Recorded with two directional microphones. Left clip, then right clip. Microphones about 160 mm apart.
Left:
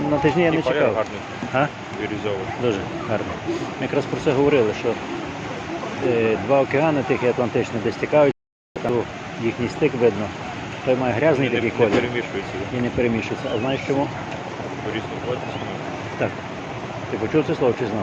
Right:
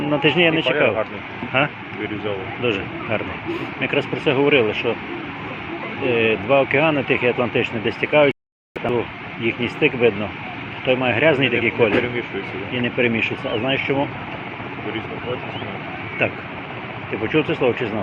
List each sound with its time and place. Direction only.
0.1 s speech: 5° left (ahead or behind)
0.7 s speech: 5° right (ahead or behind)
1.5 s speech: 15° left (ahead or behind)
4.3 s speech: 5° left (ahead or behind)
6.1 s speech: 5° left (ahead or behind)
9.6 s speech: 5° left (ahead or behind)
17.6 s speech: 10° left (ahead or behind)